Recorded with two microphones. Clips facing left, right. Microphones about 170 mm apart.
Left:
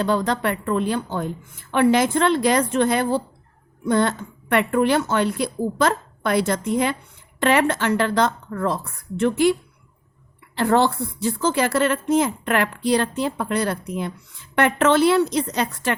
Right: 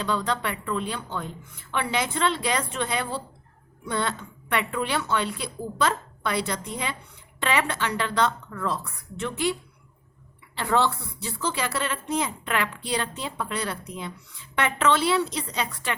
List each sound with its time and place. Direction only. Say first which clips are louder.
0.0 s speech: left 6 dB; 45° left (ahead or behind)
10.6 s speech: left 6 dB; 45° left (ahead or behind)